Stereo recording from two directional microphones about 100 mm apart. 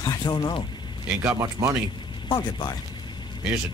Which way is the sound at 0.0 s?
40° left (ahead or behind).